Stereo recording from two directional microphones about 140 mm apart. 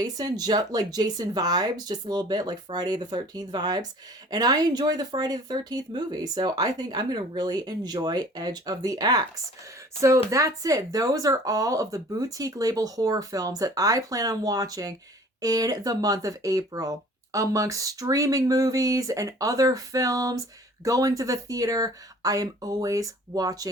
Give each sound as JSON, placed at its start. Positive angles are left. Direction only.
{"t": 0.0, "sound": "speech", "side_deg": -25}